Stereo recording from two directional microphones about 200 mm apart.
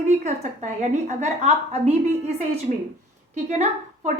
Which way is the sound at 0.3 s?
35° right (ahead or behind).